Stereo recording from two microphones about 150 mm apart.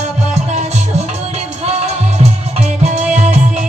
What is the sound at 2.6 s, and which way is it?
Music, 50° right (ahead or behind).